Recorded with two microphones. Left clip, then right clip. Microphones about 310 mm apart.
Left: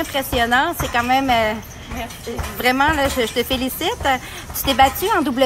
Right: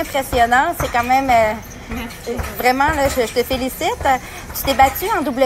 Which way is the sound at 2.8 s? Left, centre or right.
Centre.